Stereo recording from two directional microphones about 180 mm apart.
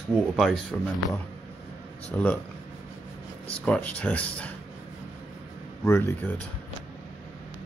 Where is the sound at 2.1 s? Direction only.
10° left (ahead or behind).